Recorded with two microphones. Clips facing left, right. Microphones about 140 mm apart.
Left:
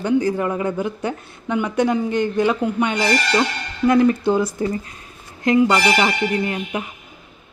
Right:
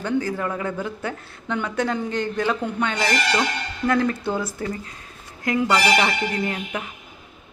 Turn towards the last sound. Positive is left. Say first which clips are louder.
# left 4 dB
turn(degrees=20)  # may be behind; listen again after turning